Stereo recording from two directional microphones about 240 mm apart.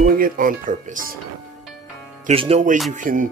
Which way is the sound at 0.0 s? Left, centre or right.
Right.